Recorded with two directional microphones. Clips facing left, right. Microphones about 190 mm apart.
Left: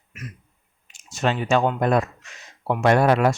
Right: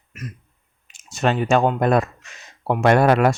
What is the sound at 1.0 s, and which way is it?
Speech, 55° right (ahead or behind).